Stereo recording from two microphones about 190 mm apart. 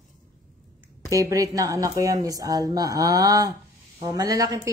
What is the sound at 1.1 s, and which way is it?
A woman's voice, 15° right (ahead or behind).